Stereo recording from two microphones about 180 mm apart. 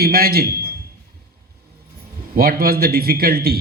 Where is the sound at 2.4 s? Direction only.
55° right (ahead or behind).